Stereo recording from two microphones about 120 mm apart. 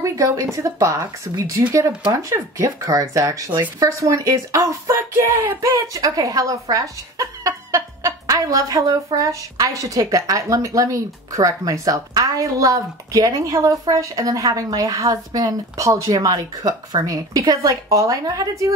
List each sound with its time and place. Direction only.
0.0 s speech: 25° right (ahead or behind)